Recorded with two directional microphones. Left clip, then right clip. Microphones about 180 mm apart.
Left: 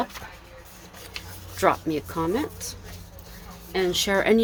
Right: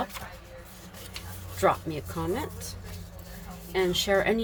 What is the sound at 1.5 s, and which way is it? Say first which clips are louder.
Speech: left 3 dB; 55° left (ahead or behind).